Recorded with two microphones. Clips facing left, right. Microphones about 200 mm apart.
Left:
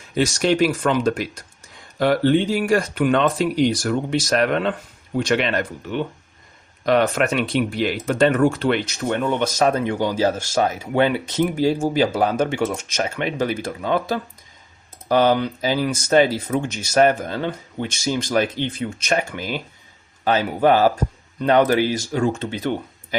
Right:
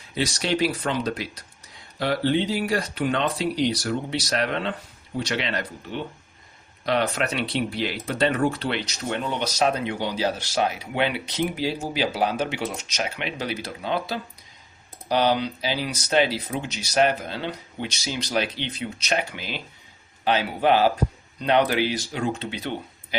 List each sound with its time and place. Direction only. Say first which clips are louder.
0.1 s speech: left 6 dB; 50° left (ahead or behind)